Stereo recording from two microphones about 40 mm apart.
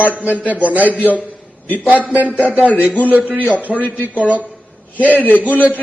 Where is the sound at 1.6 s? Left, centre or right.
Left.